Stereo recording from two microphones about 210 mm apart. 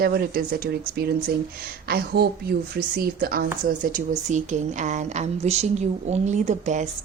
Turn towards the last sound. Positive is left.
turn(degrees=-35)  # may be behind; listen again after turning